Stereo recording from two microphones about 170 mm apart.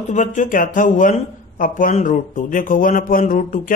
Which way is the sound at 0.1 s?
45° left (ahead or behind).